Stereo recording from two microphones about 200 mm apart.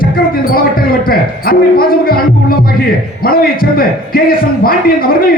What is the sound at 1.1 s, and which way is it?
A man's voice, 45° left (ahead or behind).